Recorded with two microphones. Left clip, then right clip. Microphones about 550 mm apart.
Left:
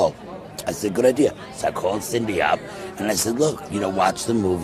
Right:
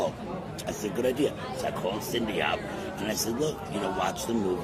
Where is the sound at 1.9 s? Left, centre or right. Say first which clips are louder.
Left 7 dB; left.